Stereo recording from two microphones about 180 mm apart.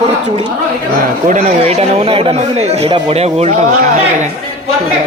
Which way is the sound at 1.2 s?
45° right (ahead or behind).